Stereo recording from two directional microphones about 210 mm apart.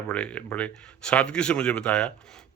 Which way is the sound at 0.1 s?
5° left (ahead or behind).